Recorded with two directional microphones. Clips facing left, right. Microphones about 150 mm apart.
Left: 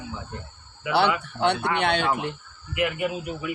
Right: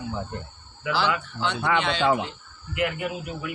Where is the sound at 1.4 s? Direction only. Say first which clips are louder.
Left 2 dB; 60° left (ahead or behind).